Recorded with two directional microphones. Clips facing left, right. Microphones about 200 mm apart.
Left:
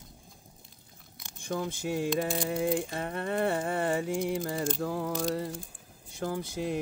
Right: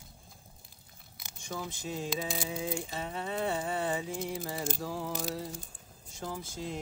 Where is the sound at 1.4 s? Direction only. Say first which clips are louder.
Left 6 dB; 55° left (ahead or behind).